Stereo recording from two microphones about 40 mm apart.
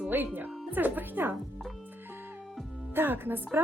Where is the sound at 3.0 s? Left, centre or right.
Right.